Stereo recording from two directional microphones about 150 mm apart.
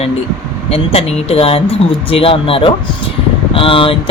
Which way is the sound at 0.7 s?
40° left (ahead or behind).